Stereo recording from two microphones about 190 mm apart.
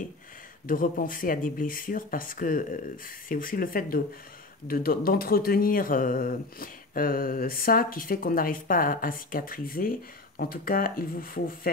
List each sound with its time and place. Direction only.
0.7 s speech: 45° left (ahead or behind)